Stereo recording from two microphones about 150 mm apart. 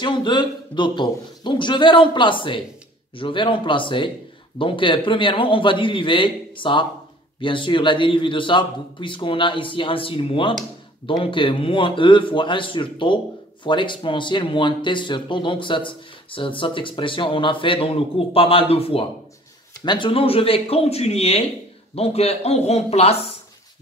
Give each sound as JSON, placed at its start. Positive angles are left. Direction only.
{"t": 0.0, "sound": "speech", "side_deg": 30}